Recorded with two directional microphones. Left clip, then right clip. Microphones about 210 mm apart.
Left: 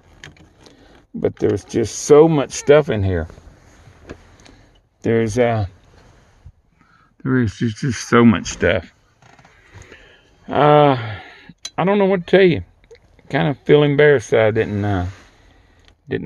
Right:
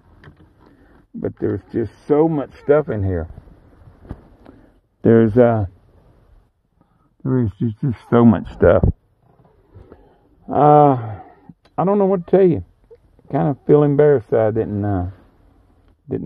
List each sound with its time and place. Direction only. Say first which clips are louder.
1.4 s speech: left 2 dB; 15° left (ahead or behind)
5.0 s speech: right 4 dB; 30° right (ahead or behind)
7.2 s speech: left 2 dB; 10° right (ahead or behind)
10.5 s speech: right 1 dB; centre (ahead or behind)